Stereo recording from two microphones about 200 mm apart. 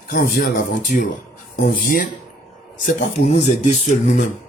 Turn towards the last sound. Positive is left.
turn(degrees=35)  # may be behind; listen again after turning